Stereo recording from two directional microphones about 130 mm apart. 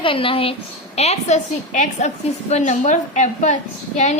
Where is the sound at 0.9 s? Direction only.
55° left (ahead or behind).